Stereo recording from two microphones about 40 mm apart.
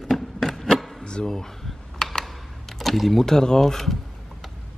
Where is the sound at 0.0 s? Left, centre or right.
Centre.